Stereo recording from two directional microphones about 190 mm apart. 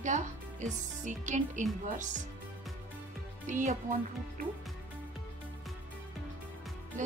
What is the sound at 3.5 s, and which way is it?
Speech, 40° right (ahead or behind).